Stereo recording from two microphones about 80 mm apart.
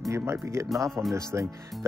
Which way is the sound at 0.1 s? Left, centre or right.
Right.